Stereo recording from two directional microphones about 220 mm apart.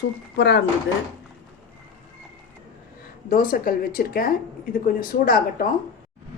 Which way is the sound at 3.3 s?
40° left (ahead or behind).